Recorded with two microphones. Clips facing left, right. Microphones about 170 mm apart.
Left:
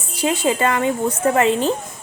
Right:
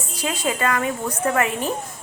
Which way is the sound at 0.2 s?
25° left (ahead or behind).